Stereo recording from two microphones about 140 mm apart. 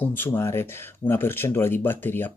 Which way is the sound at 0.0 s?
15° left (ahead or behind).